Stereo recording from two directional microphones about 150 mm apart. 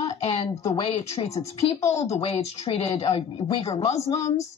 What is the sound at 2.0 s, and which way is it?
Speech, 45° left (ahead or behind).